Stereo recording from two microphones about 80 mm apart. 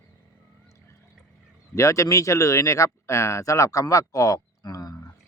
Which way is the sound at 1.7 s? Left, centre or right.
Left.